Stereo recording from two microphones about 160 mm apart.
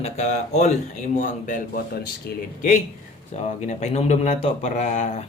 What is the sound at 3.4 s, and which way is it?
Speech, 45° left (ahead or behind).